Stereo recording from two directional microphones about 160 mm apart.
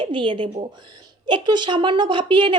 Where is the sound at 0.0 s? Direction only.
30° right (ahead or behind).